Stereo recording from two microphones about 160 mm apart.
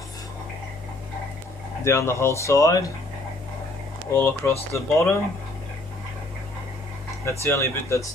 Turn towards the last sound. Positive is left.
turn(degrees=20)  # may be behind; listen again after turning